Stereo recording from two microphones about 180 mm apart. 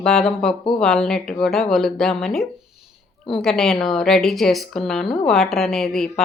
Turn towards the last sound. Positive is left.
turn(degrees=0)  # may be behind; listen again after turning